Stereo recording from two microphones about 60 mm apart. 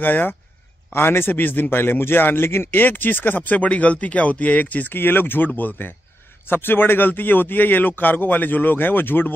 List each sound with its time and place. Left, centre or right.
0.0 s a man's voice: left